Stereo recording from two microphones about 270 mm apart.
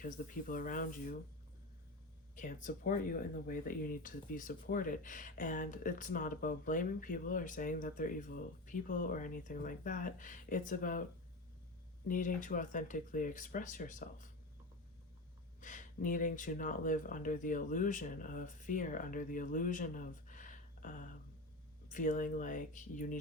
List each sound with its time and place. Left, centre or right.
0.0 s speech: left
2.3 s speech: left
12.0 s speech: left
15.6 s speech: left